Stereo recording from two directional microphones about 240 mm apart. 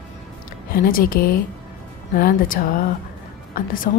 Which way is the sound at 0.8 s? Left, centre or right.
Left.